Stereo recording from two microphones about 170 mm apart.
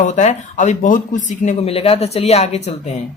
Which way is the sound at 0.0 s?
45° left (ahead or behind).